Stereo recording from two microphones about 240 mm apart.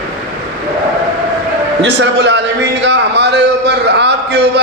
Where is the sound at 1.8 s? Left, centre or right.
Right.